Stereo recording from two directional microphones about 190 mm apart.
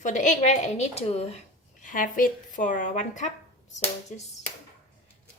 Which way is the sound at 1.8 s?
45° left (ahead or behind).